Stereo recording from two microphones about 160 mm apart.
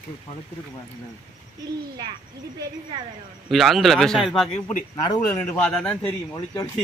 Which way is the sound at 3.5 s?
Centre (ahead or behind).